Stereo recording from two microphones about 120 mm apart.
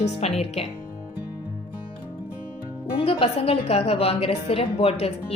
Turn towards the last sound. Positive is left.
turn(degrees=55)  # may be behind; listen again after turning